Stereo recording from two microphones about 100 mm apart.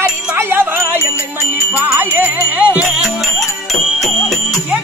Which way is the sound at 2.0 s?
15° right (ahead or behind).